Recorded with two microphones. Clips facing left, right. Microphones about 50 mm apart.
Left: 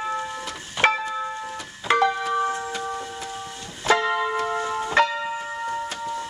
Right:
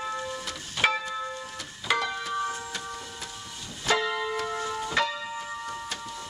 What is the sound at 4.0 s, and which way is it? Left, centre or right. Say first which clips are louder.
Music: left 5 dB; left.